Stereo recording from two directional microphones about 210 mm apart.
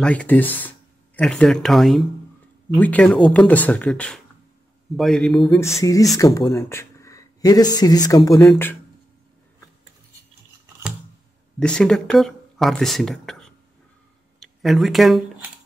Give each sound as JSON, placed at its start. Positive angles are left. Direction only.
{"t": 0.0, "sound": "speech", "side_deg": 5}
{"t": 5.8, "sound": "speech", "side_deg": 15}
{"t": 11.6, "sound": "speech", "side_deg": 5}